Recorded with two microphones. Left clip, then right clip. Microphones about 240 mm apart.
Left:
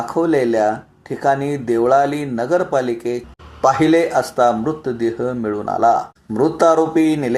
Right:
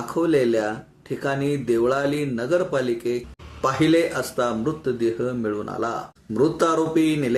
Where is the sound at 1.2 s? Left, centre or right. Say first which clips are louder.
Left 7 dB; centre.